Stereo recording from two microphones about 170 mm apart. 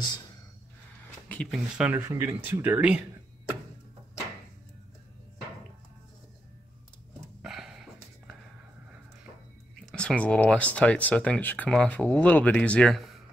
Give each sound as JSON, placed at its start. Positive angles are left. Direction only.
{"t": 1.3, "sound": "speech", "side_deg": 5}
{"t": 1.8, "sound": "speech", "side_deg": -10}
{"t": 7.4, "sound": "dog", "side_deg": -5}
{"t": 9.8, "sound": "speech", "side_deg": 5}